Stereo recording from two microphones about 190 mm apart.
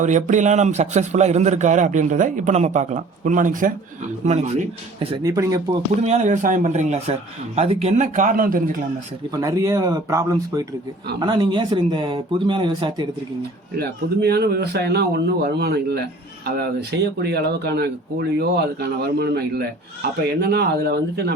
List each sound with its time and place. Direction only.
0.0 s a man's voice: 40° right (ahead or behind); by 5.6 s 20° right (ahead or behind)
6.0 s a man's voice: 35° right (ahead or behind)
9.3 s speech: 20° right (ahead or behind)
13.7 s speech: 60° right (ahead or behind)